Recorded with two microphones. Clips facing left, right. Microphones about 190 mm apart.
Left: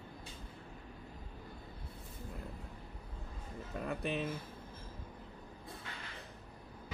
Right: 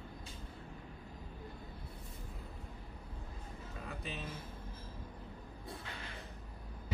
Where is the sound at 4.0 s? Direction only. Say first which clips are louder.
Left 9 dB; 60° left (ahead or behind).